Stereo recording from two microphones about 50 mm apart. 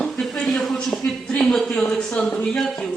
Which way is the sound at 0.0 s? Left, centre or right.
Centre.